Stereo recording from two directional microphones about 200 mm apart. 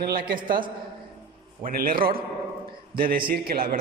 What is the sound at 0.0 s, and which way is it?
A man's voice, 50° right (ahead or behind).